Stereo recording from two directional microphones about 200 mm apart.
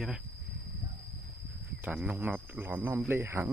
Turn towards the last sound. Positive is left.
turn(degrees=-15)  # may be behind; listen again after turning